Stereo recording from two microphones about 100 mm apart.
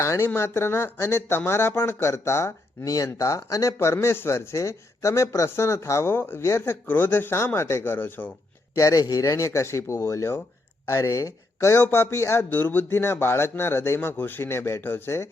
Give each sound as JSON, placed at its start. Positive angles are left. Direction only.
{"t": 0.0, "sound": "speech", "side_deg": 30}
{"t": 8.7, "sound": "speech", "side_deg": 35}